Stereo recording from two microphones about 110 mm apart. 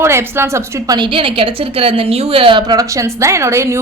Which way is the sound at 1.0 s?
55° right (ahead or behind).